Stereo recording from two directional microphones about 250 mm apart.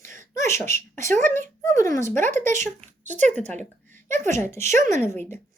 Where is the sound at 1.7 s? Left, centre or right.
Right.